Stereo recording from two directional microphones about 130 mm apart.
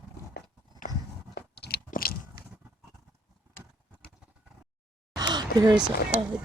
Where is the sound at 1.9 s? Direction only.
90° left.